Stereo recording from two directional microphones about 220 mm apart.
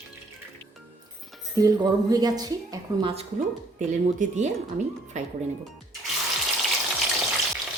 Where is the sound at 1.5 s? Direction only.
15° right (ahead or behind).